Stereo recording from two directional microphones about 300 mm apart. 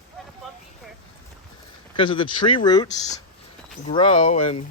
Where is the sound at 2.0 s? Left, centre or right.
Centre.